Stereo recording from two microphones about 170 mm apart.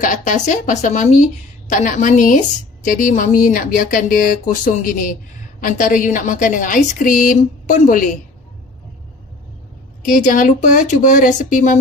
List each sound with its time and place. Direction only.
0.0 s a woman's voice: 50° left (ahead or behind)
10.0 s a woman's voice: 50° left (ahead or behind)